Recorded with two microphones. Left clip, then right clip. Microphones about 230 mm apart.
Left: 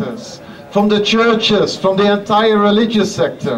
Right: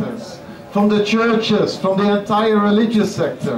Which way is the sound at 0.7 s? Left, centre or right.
Centre.